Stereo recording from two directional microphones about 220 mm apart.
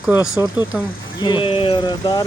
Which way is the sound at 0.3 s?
20° left (ahead or behind).